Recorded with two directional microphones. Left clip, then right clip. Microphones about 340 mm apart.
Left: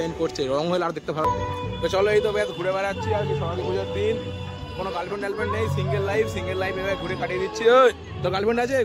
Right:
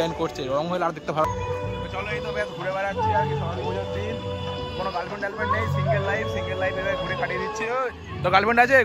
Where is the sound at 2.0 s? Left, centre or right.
Centre.